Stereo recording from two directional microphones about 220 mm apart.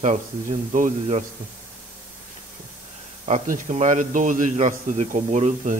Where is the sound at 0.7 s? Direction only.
35° right (ahead or behind).